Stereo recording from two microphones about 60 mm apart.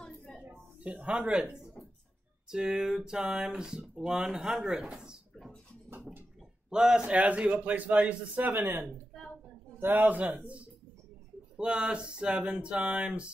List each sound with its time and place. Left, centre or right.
0.9 s speech: centre
6.7 s a man's voice: centre